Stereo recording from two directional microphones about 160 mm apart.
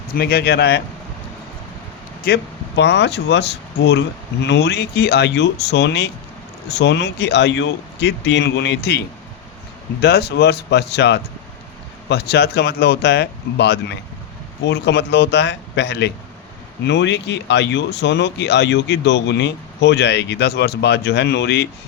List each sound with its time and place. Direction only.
0.1 s speech: 75° left (ahead or behind)
2.2 s speech: 85° left
10.0 s speech: 90° left